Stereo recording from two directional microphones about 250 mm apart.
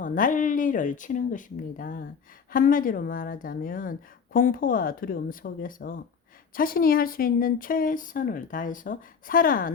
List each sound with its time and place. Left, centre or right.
0.0 s speech: left